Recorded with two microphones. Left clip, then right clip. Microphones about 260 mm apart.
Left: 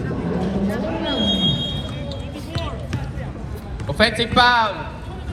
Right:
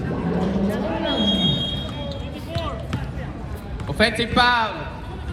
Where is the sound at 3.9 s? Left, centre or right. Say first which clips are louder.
Left 2 dB; centre.